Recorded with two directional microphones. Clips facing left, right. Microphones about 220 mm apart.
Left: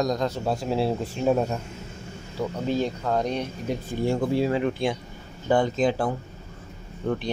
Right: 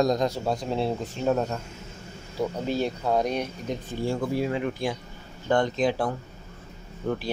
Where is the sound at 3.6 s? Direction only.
10° left (ahead or behind).